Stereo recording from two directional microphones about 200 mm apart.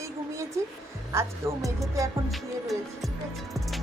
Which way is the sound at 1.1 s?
15° right (ahead or behind).